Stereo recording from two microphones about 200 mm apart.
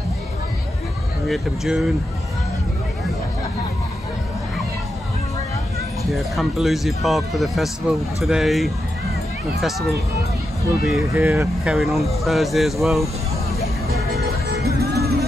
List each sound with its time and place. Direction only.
1.2 s speech: centre (ahead or behind)
6.1 s speech: centre (ahead or behind)
11.0 s speech: 15° right (ahead or behind)
11.7 s speech: centre (ahead or behind)
14.5 s music: 55° right (ahead or behind)